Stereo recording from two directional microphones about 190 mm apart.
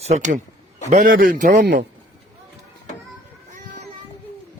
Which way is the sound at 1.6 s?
65° right (ahead or behind).